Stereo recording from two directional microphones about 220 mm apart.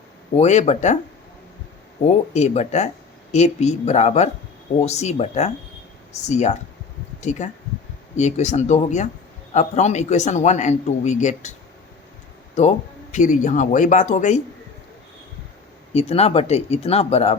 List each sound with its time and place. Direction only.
0.3 s speech: 30° left (ahead or behind)
2.0 s speech: 30° left (ahead or behind)
12.5 s speech: 30° left (ahead or behind)
15.9 s speech: 30° left (ahead or behind)